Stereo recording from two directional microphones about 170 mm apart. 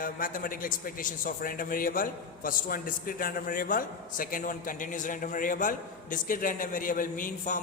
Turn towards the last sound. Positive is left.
turn(degrees=50)  # may be behind; listen again after turning